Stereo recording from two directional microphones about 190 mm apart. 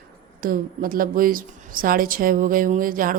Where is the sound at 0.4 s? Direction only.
50° right (ahead or behind).